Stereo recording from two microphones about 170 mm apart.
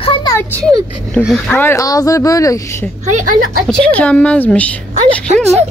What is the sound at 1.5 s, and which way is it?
Speech, 15° left (ahead or behind).